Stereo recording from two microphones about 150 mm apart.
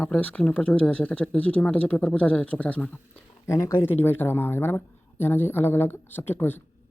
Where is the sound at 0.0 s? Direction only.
10° left (ahead or behind).